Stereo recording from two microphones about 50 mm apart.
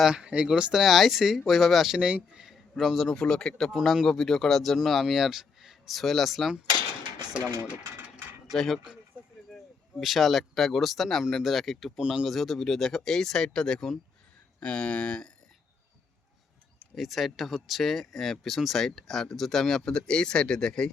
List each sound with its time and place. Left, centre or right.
0.1 s speech: centre
0.8 s speech: centre
2.0 s speech: right
2.4 s a sound: centre
3.2 s speech: centre
3.7 s speech: centre
8.4 s speech: centre
10.0 s speech: centre
11.9 s speech: centre
12.2 s speech: centre
16.9 s speech: centre